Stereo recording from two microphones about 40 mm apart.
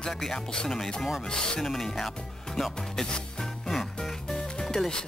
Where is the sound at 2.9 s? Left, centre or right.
Left.